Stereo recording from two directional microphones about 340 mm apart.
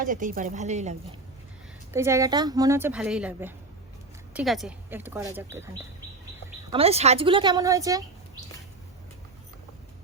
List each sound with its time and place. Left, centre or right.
0.0 s speech: right
1.9 s a woman's voice: centre
6.7 s a woman's voice: centre